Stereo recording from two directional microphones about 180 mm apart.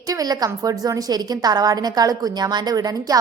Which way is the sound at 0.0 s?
20° right (ahead or behind).